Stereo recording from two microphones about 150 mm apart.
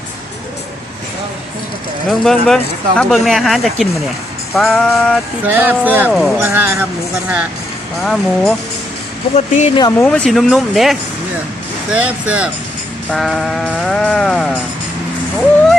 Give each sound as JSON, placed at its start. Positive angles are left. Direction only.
{"t": 2.0, "sound": "speech", "side_deg": 0}
{"t": 5.5, "sound": "speech", "side_deg": -10}
{"t": 6.1, "sound": "speech", "side_deg": 0}
{"t": 6.4, "sound": "speech", "side_deg": -15}
{"t": 8.0, "sound": "speech", "side_deg": 0}
{"t": 9.3, "sound": "speech", "side_deg": 45}
{"t": 10.0, "sound": "speech", "side_deg": 5}
{"t": 13.1, "sound": "speech", "side_deg": 0}